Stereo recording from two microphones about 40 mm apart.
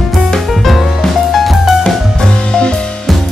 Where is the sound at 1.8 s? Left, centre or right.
Centre.